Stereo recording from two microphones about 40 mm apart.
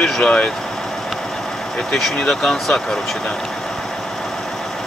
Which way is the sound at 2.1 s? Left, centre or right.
Centre.